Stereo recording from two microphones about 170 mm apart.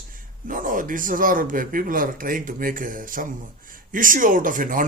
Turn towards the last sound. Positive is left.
turn(degrees=-50)  # may be behind; listen again after turning